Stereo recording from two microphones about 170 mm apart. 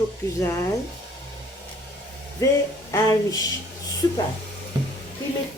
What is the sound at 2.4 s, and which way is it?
Speech, 15° left (ahead or behind).